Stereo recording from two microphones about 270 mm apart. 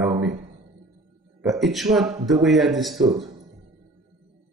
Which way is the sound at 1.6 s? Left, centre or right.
Centre.